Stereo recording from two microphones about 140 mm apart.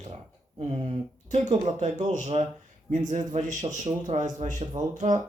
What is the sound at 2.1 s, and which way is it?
A man's voice, 55° right (ahead or behind).